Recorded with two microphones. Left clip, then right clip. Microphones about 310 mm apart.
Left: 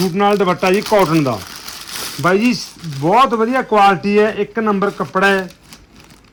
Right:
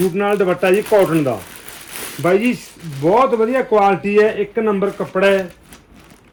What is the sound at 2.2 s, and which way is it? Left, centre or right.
A man's voice, centre.